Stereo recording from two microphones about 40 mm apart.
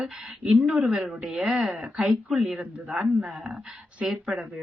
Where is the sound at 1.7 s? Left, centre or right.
Right.